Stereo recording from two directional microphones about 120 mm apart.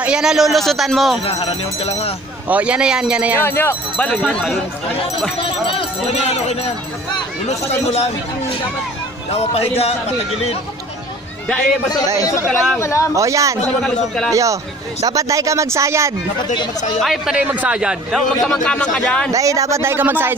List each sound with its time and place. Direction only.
0.0 s a man's voice: 5° right (ahead or behind)
1.2 s speech: 50° left (ahead or behind)
2.4 s a man's voice: 10° right (ahead or behind)
3.3 s speech: 20° left (ahead or behind)
5.4 s speech: 45° left (ahead or behind)
7.7 s speech: 60° left (ahead or behind)
12.2 s speech: 25° left (ahead or behind)
13.1 s speech: 25° right (ahead or behind)
13.7 s a man's voice: 5° left (ahead or behind)
14.3 s speech: 25° right (ahead or behind)
17.0 s a man's voice: centre (ahead or behind)
17.4 s a man's voice: 10° right (ahead or behind); by 19.3 s 5° left (ahead or behind)
19.3 s speech: 30° right (ahead or behind)